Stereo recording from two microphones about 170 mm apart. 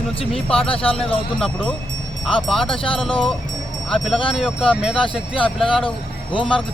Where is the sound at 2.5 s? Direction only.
30° left (ahead or behind).